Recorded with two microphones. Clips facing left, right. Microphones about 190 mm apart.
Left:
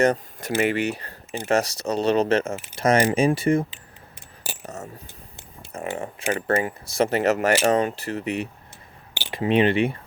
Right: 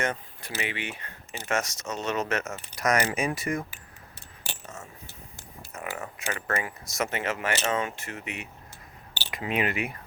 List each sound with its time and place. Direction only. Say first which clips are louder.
0.0 s speech: left 10 dB; 40° left (ahead or behind)
4.4 s coin: left 6 dB; 40° left (ahead or behind)
5.7 s speech: left 7 dB; 30° left (ahead or behind)